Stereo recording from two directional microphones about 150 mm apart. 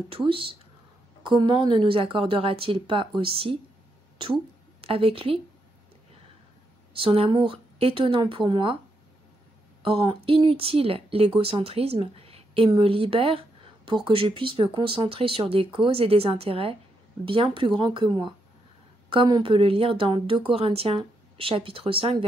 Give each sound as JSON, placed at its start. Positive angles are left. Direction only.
{"t": 0.1, "sound": "speech", "side_deg": -35}
{"t": 4.8, "sound": "speech", "side_deg": -40}
{"t": 7.0, "sound": "speech", "side_deg": -35}
{"t": 9.8, "sound": "speech", "side_deg": -35}